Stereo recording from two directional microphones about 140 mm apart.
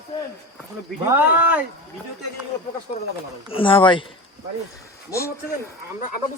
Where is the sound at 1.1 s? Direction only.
15° right (ahead or behind).